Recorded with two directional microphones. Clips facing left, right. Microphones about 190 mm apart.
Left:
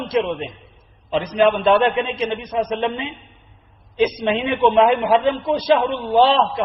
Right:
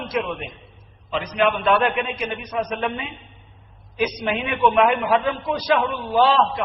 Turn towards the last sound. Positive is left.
turn(degrees=25)  # may be behind; listen again after turning